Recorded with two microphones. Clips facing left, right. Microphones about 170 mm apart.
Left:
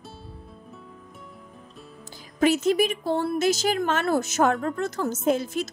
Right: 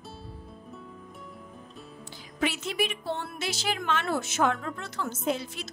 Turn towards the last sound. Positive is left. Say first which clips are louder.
# left 7 dB
turn(degrees=45)  # may be behind; listen again after turning